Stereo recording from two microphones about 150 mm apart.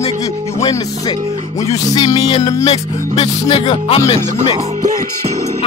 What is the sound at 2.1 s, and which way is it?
Speech, 45° left (ahead or behind).